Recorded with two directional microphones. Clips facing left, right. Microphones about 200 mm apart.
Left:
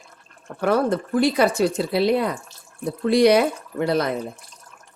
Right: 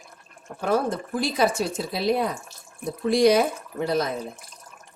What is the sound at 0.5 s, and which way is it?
Speech, 65° left (ahead or behind).